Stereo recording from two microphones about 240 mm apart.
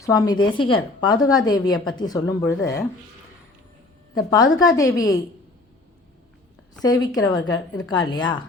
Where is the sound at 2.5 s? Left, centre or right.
Left.